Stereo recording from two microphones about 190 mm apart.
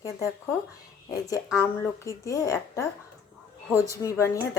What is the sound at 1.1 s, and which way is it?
A woman's voice, 20° left (ahead or behind).